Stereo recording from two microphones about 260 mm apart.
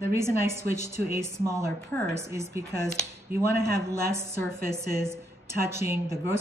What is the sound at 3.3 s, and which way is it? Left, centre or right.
Speech, right.